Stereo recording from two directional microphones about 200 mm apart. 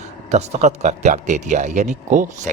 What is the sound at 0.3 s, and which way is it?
Speech, 35° right (ahead or behind).